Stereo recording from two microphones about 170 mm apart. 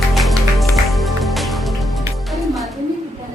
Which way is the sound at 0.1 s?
Centre (ahead or behind).